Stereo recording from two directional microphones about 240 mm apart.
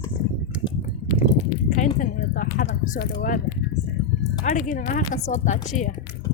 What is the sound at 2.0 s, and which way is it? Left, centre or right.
Speech, left.